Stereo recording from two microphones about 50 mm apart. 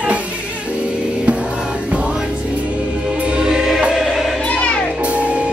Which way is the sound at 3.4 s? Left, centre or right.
Centre.